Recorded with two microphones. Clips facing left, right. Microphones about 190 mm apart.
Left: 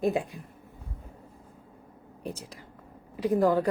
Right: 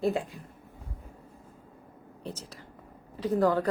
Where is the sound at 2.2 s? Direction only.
10° left (ahead or behind).